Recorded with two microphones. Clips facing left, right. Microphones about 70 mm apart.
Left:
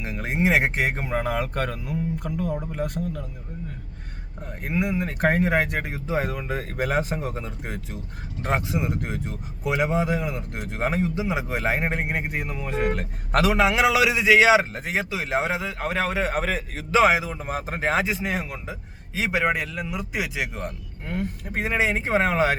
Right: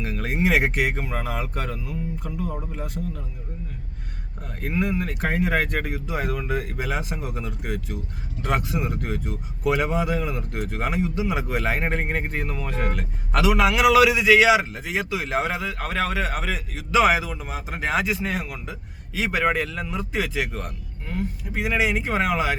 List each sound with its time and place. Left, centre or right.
0.0 s speech: left
4.4 s speech: centre
5.1 s speech: left
5.5 s speech: centre
6.7 s speech: left; by 12.8 s centre
13.0 s speech: left
13.6 s speech: left
15.1 s speech: left
17.4 s speech: left; by 20.7 s centre
21.1 s speech: left
21.7 s speech: left